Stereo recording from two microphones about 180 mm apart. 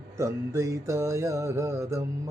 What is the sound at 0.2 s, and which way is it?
Music, 15° right (ahead or behind).